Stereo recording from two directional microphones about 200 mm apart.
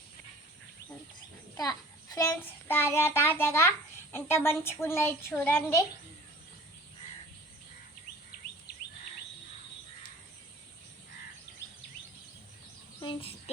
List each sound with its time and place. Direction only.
2.1 s a woman's voice: 10° left (ahead or behind)
13.0 s speech: 25° left (ahead or behind)